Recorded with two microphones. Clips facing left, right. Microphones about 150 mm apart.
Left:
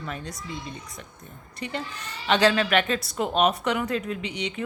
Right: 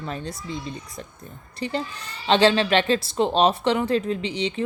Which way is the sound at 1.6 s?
30° right (ahead or behind).